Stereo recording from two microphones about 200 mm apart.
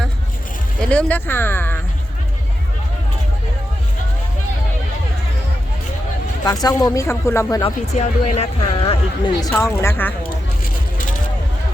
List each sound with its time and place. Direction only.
0.8 s speech: 5° left (ahead or behind)
6.4 s speech: 20° left (ahead or behind)
7.6 s speech: 35° left (ahead or behind)
9.6 s speech: 15° left (ahead or behind)